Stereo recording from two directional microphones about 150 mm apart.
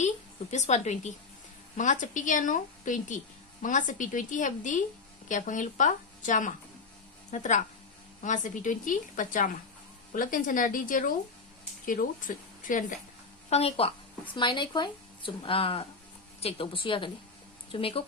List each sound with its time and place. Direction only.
0.5 s a woman's voice: 50° left (ahead or behind)
13.5 s speech: 40° left (ahead or behind)